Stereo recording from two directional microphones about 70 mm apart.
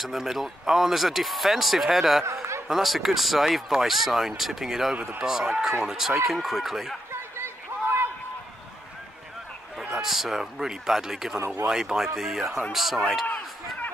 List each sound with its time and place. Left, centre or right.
0.0 s speech: centre
7.1 s a sound: right
10.0 s speech: centre
11.3 s speech: right
11.6 s speech: centre